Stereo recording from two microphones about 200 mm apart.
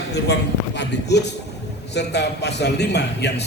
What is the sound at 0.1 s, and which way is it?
A man's voice, 55° left (ahead or behind).